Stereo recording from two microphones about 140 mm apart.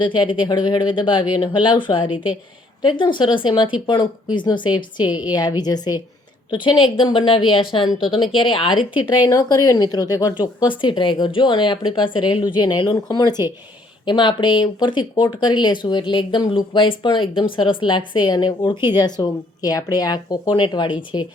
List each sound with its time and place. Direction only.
0.0 s speech: 35° left (ahead or behind)